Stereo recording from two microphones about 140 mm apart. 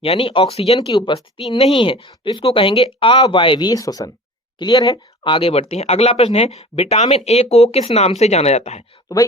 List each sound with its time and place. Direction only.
0.0 s speech: 40° left (ahead or behind)
0.8 s speech: 35° left (ahead or behind); by 8.8 s 50° left (ahead or behind)